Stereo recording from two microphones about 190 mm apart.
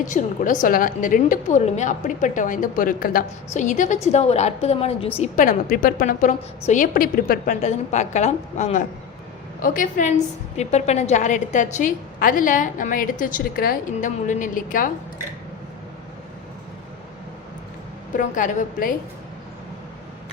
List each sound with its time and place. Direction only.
0.1 s a woman's voice: 45° left (ahead or behind)
18.2 s a woman's voice: 40° left (ahead or behind)